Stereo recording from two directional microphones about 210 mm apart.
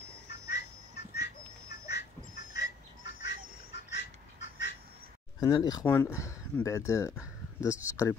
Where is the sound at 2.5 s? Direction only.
55° left (ahead or behind).